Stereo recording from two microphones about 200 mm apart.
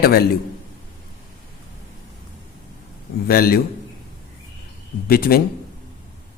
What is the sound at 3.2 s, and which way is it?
Speech, 50° left (ahead or behind).